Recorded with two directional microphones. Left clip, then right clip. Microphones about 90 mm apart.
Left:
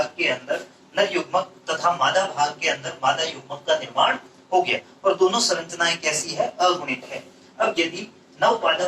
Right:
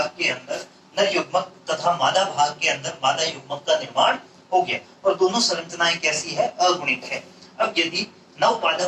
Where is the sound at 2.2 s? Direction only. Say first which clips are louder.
Right 2 dB; 30° left (ahead or behind).